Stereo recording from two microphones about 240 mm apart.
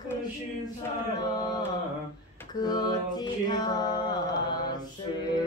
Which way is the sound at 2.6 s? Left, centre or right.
Centre.